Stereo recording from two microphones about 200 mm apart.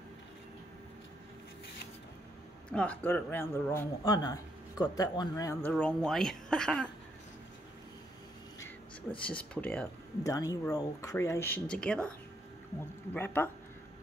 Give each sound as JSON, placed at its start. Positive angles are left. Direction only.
{"t": 2.7, "sound": "speech", "side_deg": 5}
{"t": 9.2, "sound": "speech", "side_deg": 5}
{"t": 10.2, "sound": "speech", "side_deg": 15}
{"t": 13.1, "sound": "speech", "side_deg": 10}